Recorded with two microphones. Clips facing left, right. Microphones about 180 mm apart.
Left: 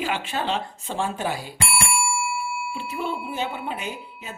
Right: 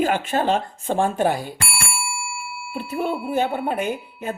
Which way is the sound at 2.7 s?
45° right (ahead or behind).